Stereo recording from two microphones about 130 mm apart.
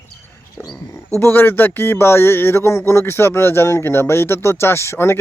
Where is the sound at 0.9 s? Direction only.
20° left (ahead or behind).